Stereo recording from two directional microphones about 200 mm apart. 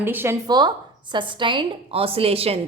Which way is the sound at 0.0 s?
10° right (ahead or behind).